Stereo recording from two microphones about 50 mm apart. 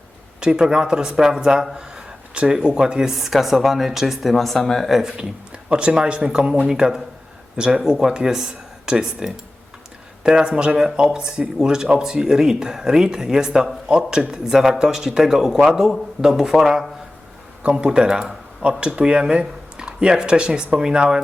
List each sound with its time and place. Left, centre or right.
0.3 s speech: centre
4.9 s speech: centre
5.6 s speech: centre
17.6 s speech: right